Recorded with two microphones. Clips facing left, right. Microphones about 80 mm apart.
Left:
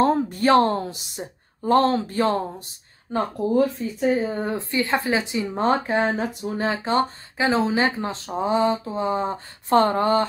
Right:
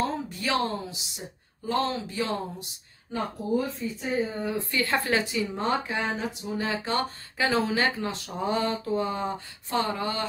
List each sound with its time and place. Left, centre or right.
0.0 s speech: left
4.6 s speech: left
5.5 s speech: left
6.7 s speech: left
9.7 s speech: left